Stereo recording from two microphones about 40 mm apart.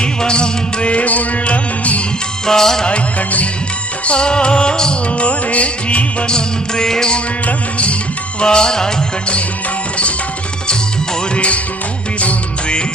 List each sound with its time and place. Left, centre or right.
0.0 s music: left
2.5 s music: centre
3.2 s music: left
4.0 s music: left
6.3 s music: centre
7.4 s music: left
8.4 s music: centre
11.3 s music: left